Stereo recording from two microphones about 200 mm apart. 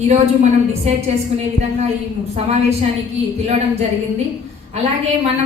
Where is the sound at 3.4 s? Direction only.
30° right (ahead or behind).